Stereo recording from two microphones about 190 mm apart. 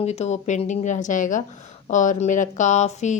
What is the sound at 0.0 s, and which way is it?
A woman's voice, 35° left (ahead or behind).